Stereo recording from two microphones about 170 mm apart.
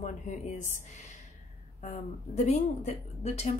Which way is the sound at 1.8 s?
45° left (ahead or behind).